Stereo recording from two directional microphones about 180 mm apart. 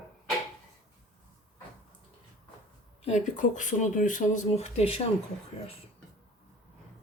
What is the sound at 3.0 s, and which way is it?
Speech, 40° left (ahead or behind).